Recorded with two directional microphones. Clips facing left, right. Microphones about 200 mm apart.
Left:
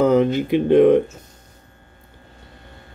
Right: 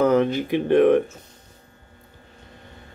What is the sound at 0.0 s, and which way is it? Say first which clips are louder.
Speech: left 3 dB; 15° left (ahead or behind).